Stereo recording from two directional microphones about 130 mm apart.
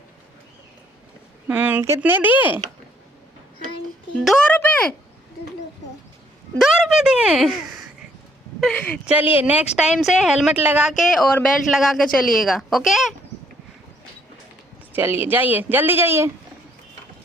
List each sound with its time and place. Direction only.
1.5 s a woman's voice: 10° right (ahead or behind)
4.1 s a woman's voice: 5° left (ahead or behind)
4.5 s a sound: 10° left (ahead or behind)
6.6 s a woman's voice: 5° right (ahead or behind)
8.6 s speech: 10° left (ahead or behind)
9.0 s a woman's voice: 10° right (ahead or behind)
10.9 s a woman's voice: centre (ahead or behind)
14.9 s a woman's voice: 15° right (ahead or behind)